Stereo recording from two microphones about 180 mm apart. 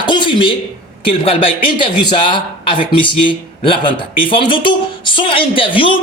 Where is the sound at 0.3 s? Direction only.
25° left (ahead or behind).